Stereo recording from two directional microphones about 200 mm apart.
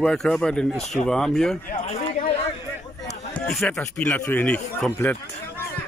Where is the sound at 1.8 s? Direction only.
30° left (ahead or behind).